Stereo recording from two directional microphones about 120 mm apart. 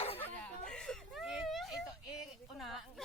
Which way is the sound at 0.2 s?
10° left (ahead or behind).